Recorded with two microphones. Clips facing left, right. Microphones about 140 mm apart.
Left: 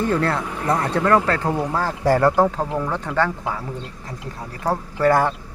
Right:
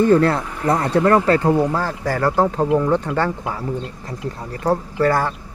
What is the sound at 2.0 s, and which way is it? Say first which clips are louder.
Speech: left 5 dB; 30° left (ahead or behind).